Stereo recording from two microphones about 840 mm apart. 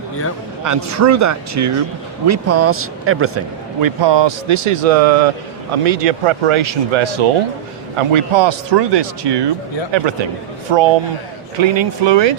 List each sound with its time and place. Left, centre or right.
0.6 s speech: centre